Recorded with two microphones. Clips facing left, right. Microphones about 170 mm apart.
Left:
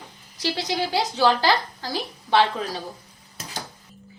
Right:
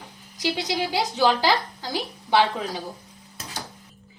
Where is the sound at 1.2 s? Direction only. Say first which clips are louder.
Left 1 dB; 20° right (ahead or behind).